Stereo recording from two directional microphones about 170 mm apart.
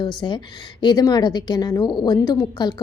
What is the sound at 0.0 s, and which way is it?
A woman's voice, 25° left (ahead or behind).